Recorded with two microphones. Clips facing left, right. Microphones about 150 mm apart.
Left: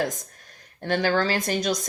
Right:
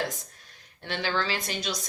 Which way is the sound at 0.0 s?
45° left (ahead or behind).